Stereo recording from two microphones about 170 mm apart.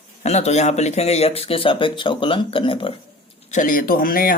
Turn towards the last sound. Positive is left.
turn(degrees=55)  # may be behind; listen again after turning